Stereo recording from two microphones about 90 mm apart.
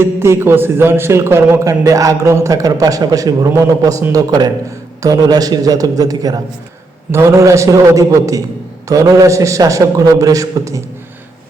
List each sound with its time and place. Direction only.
0.0 s a man's voice: 30° right (ahead or behind)
1.8 s a man's voice: 40° right (ahead or behind)
4.1 s a man's voice: 50° right (ahead or behind)
7.1 s a man's voice: 30° right (ahead or behind)